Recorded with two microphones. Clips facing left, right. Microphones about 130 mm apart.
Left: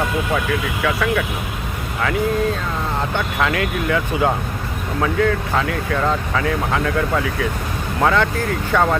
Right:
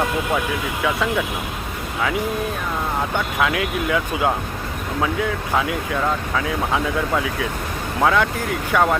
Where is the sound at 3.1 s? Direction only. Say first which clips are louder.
Left 1 dB; 5° right (ahead or behind).